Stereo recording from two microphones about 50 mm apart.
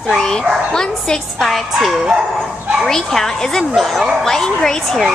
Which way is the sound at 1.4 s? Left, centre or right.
Centre.